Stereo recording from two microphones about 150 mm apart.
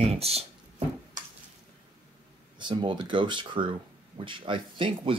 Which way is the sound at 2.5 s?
30° right (ahead or behind).